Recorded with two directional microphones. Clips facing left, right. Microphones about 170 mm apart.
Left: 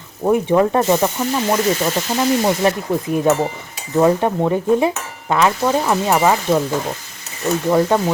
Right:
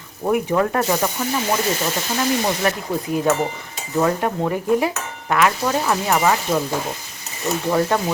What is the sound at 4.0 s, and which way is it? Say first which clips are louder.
Speech: left 5 dB; 20° left (ahead or behind).